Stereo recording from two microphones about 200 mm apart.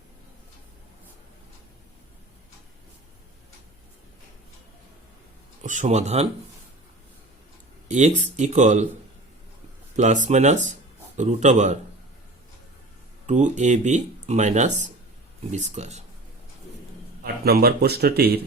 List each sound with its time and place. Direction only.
5.6 s speech: 35° right (ahead or behind)
7.9 s speech: 35° right (ahead or behind)
9.9 s speech: 35° right (ahead or behind)
13.2 s speech: 35° right (ahead or behind)
17.4 s speech: 50° right (ahead or behind)